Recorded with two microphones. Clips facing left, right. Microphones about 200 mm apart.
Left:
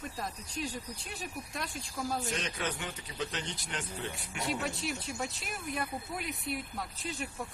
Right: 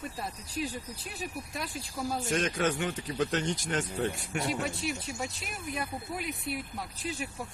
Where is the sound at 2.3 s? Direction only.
50° right (ahead or behind).